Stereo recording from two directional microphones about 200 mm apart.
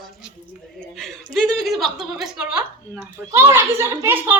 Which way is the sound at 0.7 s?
Centre (ahead or behind).